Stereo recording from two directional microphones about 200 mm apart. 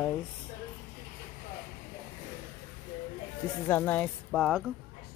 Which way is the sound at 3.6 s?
10° left (ahead or behind).